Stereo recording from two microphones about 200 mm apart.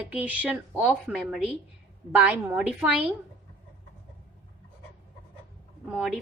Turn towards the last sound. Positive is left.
turn(degrees=-5)  # may be behind; listen again after turning